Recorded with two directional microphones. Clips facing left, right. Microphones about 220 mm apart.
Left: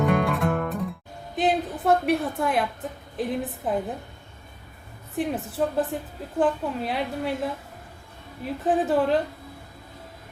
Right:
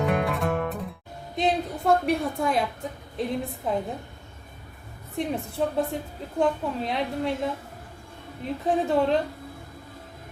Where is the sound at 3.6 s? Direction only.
5° left (ahead or behind).